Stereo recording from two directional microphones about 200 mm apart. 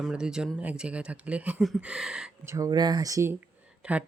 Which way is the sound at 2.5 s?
20° right (ahead or behind).